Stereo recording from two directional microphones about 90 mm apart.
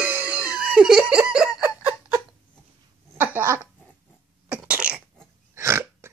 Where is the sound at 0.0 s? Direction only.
20° right (ahead or behind).